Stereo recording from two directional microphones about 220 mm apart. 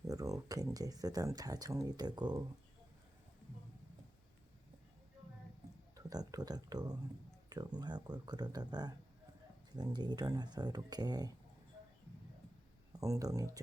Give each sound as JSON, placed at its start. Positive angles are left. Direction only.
{"t": 0.1, "sound": "speech", "side_deg": -15}
{"t": 6.0, "sound": "speech", "side_deg": -15}
{"t": 13.0, "sound": "speech", "side_deg": -15}